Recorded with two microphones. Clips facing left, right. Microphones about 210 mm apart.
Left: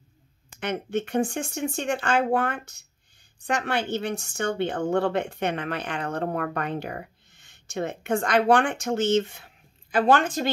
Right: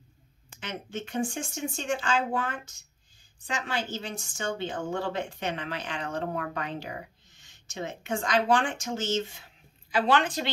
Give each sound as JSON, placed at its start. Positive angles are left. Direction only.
{"t": 0.6, "sound": "a woman's voice", "side_deg": 60}